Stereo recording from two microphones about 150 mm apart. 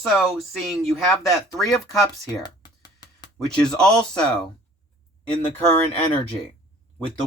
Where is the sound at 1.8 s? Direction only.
25° left (ahead or behind).